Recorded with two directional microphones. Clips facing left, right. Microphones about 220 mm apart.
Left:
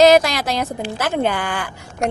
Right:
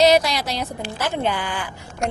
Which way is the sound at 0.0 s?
90° left.